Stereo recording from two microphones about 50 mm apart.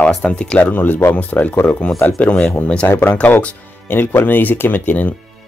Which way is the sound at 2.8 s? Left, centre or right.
Left.